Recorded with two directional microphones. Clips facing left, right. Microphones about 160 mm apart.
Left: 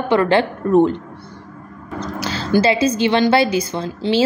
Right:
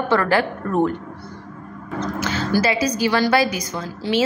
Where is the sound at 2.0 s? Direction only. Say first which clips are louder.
Right 1 dB; 35° left (ahead or behind).